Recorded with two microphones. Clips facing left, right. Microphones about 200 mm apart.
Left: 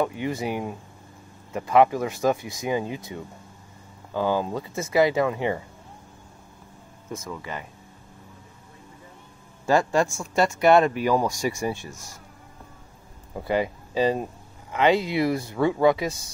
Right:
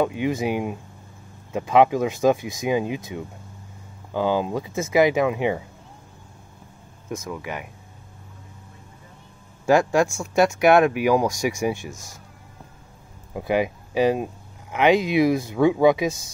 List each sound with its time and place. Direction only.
0.0 s speech: 20° right (ahead or behind)
4.1 s speech: 15° right (ahead or behind)
7.1 s speech: 15° right (ahead or behind)
9.7 s speech: 10° right (ahead or behind)
13.3 s speech: 15° right (ahead or behind)